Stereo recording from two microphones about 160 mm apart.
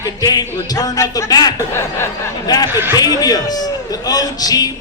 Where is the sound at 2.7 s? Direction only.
15° right (ahead or behind).